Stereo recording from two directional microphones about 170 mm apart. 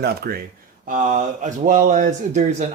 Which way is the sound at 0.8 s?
50° right (ahead or behind).